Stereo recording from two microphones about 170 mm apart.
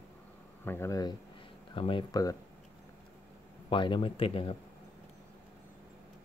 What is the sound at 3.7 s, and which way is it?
Speech, 30° left (ahead or behind).